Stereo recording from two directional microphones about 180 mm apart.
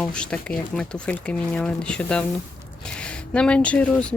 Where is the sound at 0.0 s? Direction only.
5° left (ahead or behind).